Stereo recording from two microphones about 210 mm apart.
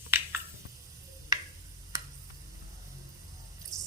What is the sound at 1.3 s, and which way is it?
Tick-tock, 15° right (ahead or behind).